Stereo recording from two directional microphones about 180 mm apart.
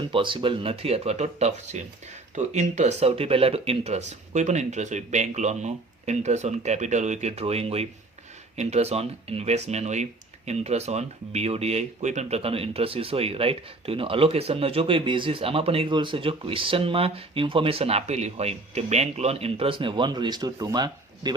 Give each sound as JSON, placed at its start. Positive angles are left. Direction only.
{"t": 0.1, "sound": "speech", "side_deg": -30}